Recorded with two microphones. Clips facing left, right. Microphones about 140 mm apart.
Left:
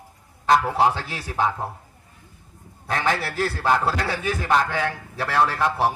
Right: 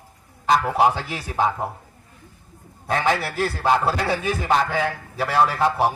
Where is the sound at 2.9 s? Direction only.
20° right (ahead or behind).